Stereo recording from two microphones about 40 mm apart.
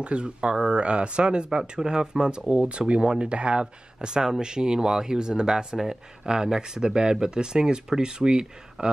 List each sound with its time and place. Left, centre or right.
0.0 s speech: right